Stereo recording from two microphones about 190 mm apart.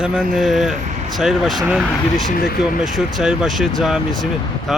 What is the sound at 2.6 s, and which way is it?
Speech, 5° right (ahead or behind).